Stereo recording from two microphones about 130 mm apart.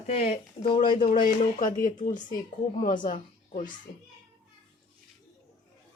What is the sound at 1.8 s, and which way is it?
Speech, 75° left (ahead or behind).